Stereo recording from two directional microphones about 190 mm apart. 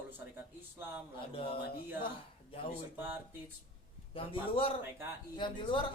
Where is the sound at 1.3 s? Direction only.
30° left (ahead or behind).